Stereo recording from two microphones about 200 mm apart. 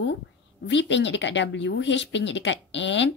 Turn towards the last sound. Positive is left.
turn(degrees=65)  # may be behind; listen again after turning